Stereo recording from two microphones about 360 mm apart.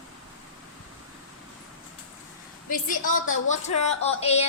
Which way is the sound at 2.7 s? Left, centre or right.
Left.